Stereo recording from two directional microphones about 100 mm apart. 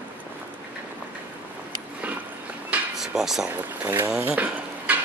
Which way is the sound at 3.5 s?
25° right (ahead or behind).